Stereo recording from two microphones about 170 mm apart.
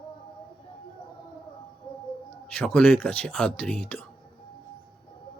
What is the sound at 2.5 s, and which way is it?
Speech, 10° left (ahead or behind).